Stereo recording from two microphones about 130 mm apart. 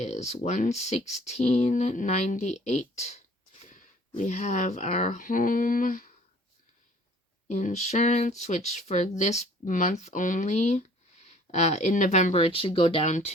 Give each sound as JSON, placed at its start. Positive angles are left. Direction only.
{"t": 0.0, "sound": "speech", "side_deg": 60}
{"t": 3.7, "sound": "speech", "side_deg": 85}
{"t": 7.4, "sound": "speech", "side_deg": 60}